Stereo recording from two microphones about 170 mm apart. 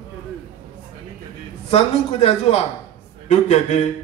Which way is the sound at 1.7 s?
35° left (ahead or behind).